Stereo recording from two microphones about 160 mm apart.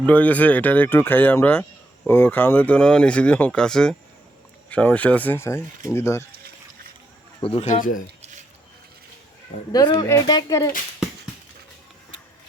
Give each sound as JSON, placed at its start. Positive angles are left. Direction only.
{"t": 0.0, "sound": "speech", "side_deg": 10}
{"t": 7.4, "sound": "a man's voice", "side_deg": 40}
{"t": 9.7, "sound": "speech", "side_deg": 25}